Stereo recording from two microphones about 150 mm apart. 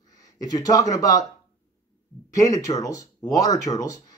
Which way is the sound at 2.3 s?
25° left (ahead or behind).